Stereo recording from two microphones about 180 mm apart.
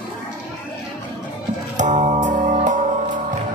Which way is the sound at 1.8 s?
45° right (ahead or behind).